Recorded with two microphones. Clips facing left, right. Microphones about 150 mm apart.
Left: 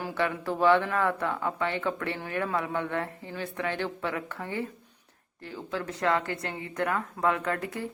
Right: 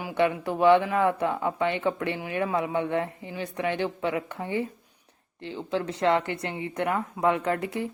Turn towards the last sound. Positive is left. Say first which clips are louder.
# right 4 dB
turn(degrees=-25)  # may be behind; listen again after turning